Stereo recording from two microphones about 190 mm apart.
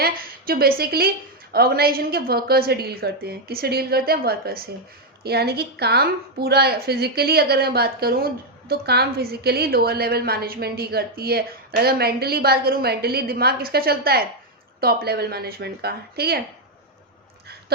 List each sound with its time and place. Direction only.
0.0 s a woman's voice: 50° right (ahead or behind)